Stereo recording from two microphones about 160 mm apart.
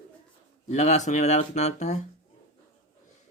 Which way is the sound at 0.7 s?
45° left (ahead or behind).